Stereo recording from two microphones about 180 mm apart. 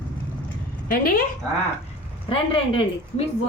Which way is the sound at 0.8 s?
55° left (ahead or behind).